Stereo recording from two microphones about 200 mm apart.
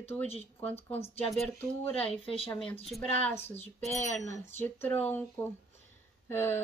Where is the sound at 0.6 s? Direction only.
10° left (ahead or behind).